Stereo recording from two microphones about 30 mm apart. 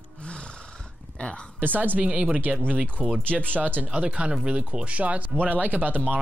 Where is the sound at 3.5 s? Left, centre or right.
Right.